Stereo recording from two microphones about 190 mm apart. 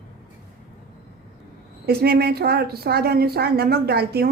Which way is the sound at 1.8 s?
55° right (ahead or behind).